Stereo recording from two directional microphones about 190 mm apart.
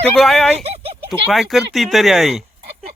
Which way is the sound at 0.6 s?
30° right (ahead or behind).